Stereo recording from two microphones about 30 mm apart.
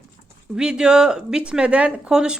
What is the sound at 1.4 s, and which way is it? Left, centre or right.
Speech, right.